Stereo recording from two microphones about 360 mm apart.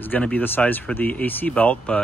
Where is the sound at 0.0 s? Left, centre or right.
Centre.